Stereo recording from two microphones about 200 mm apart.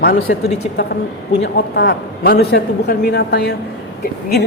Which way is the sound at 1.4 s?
55° left (ahead or behind).